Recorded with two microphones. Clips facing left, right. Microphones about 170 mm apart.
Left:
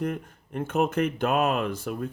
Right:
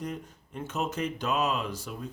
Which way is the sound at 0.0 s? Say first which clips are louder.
Left 6 dB; 55° left (ahead or behind).